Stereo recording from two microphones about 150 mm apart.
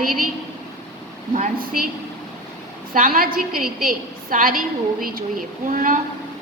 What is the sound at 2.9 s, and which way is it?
A woman's voice, 65° right (ahead or behind).